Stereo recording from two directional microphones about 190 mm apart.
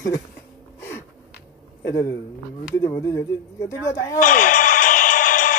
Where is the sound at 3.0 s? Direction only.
15° left (ahead or behind).